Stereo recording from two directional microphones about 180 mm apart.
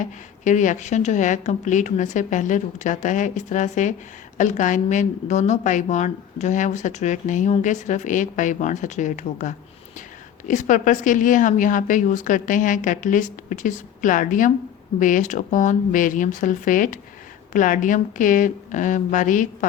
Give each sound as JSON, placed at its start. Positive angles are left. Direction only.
{"t": 0.0, "sound": "a woman's voice", "side_deg": 45}